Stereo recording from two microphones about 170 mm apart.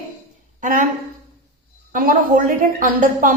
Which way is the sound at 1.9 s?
50° right (ahead or behind).